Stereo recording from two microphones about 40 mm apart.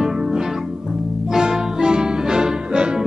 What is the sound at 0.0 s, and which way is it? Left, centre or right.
Music, centre.